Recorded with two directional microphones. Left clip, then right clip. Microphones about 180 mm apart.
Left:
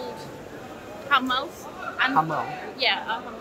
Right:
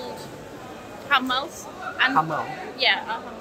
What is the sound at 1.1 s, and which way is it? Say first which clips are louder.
A woman's voice: right 1 dB; 10° right (ahead or behind).